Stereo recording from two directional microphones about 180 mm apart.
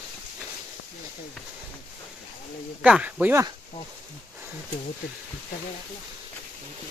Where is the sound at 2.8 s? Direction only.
5° right (ahead or behind).